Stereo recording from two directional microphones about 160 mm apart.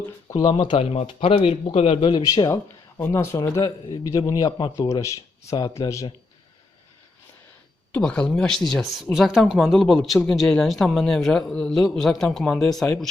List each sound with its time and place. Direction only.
0.6 s speech: 35° left (ahead or behind)
2.3 s speech: 20° left (ahead or behind)
7.9 s speech: 5° left (ahead or behind)